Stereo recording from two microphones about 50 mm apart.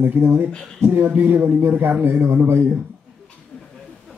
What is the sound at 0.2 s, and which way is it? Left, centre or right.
Speech, right.